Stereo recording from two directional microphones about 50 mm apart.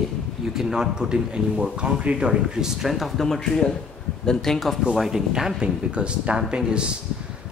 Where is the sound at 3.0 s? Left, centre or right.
Centre.